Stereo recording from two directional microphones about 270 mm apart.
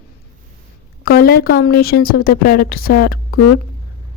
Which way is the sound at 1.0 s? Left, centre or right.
Left.